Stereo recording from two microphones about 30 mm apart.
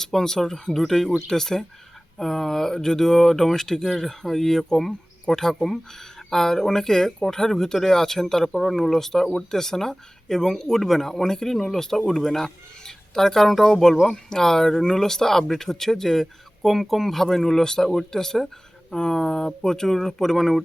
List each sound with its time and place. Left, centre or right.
0.0 s speech: centre
8.5 s speech: centre
16.6 s speech: centre